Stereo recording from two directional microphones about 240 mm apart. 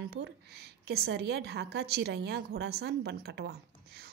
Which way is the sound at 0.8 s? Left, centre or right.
Right.